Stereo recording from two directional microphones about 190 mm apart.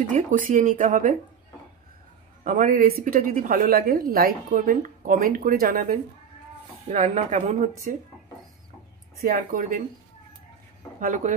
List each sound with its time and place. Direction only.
0.1 s a woman's voice: 40° right (ahead or behind)
2.4 s a woman's voice: 45° right (ahead or behind)
6.9 s speech: 40° right (ahead or behind)
9.2 s a woman's voice: 50° right (ahead or behind)
11.0 s speech: 40° right (ahead or behind)